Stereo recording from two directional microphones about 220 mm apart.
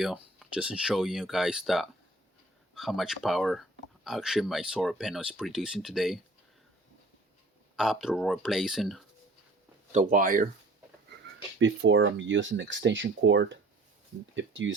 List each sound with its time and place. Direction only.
0.0 s speech: centre (ahead or behind)
7.8 s speech: centre (ahead or behind)
9.9 s speech: 35° right (ahead or behind)
11.6 s speech: 60° right (ahead or behind)